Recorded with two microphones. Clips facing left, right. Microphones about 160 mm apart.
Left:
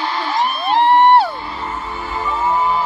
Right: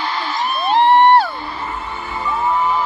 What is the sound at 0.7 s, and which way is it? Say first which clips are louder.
Music: right 1 dB; 5° left (ahead or behind).